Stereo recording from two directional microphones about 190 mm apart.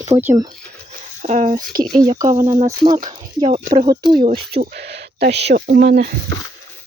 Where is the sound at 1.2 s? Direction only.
40° right (ahead or behind).